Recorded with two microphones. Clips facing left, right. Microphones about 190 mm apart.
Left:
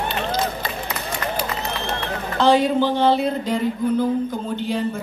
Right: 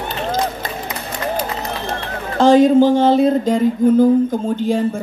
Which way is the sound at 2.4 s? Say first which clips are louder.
Right 7 dB; 45° right (ahead or behind).